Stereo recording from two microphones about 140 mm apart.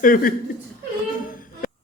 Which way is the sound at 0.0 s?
80° left.